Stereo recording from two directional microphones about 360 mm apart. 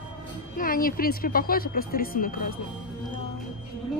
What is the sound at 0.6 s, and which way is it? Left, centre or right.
A woman's voice, left.